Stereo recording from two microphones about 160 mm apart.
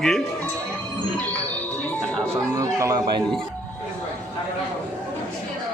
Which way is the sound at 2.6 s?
20° right (ahead or behind).